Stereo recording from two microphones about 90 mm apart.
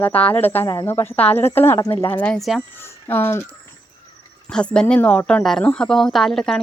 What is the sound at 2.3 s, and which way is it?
Speech, centre (ahead or behind).